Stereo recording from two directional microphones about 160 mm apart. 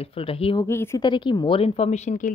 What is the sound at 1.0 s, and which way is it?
A woman's voice, 30° left (ahead or behind).